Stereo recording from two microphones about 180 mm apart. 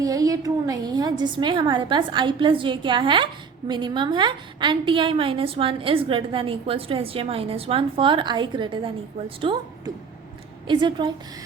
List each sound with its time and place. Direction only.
0.0 s a woman's voice: 20° right (ahead or behind)